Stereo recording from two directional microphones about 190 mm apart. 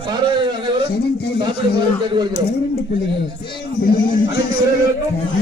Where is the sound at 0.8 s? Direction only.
60° left (ahead or behind).